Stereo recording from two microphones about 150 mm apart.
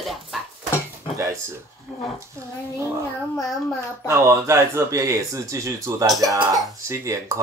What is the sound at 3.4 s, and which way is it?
Speech, 5° left (ahead or behind).